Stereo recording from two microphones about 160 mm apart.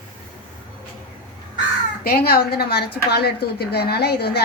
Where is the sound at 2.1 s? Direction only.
75° left (ahead or behind).